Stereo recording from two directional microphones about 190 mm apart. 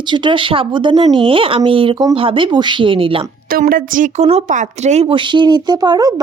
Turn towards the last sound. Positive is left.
turn(degrees=-20)  # may be behind; listen again after turning